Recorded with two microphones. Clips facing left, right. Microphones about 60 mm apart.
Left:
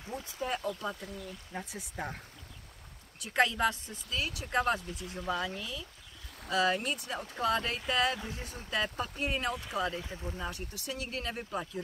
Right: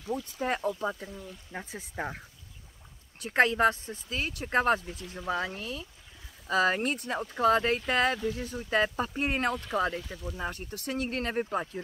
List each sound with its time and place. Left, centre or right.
0.2 s speech: right
0.6 s speech: right
3.2 s speech: right
8.2 s speech: left
8.6 s speech: right
9.9 s speech: left
10.4 s speech: right